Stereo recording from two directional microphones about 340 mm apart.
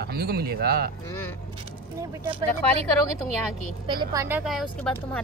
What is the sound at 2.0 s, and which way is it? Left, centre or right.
Speech, centre.